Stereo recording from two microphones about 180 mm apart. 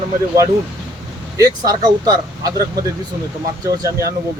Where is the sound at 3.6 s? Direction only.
20° right (ahead or behind).